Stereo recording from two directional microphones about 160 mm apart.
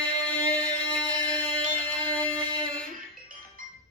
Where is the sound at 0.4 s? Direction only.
30° right (ahead or behind).